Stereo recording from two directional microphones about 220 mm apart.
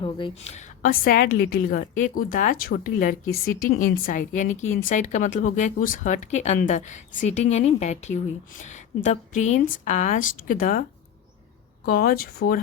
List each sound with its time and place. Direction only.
0.0 s a woman's voice: 25° left (ahead or behind)
1.0 s speech: 45° left (ahead or behind)
11.9 s speech: 45° left (ahead or behind)